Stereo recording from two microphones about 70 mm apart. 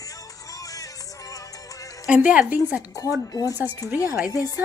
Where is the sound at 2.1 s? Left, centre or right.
Centre.